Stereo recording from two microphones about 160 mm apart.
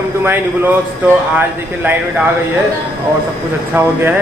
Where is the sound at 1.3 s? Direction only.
10° right (ahead or behind).